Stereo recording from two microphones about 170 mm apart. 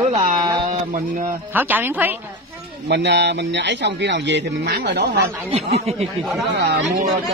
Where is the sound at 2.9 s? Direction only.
90° right.